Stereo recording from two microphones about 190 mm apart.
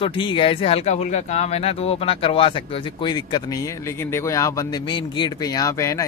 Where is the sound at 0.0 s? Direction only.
25° left (ahead or behind).